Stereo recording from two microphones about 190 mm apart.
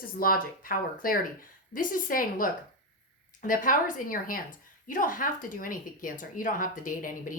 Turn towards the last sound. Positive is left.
turn(degrees=45)  # may be behind; listen again after turning